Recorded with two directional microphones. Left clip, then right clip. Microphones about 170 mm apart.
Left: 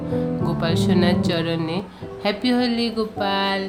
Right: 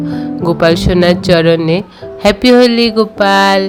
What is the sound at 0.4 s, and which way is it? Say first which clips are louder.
Speech: right 18 dB; 45° right (ahead or behind).